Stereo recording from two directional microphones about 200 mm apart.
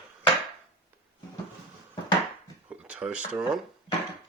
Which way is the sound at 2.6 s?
5° right (ahead or behind).